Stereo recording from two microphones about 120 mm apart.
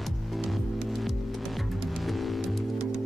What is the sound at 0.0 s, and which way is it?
Music, centre (ahead or behind).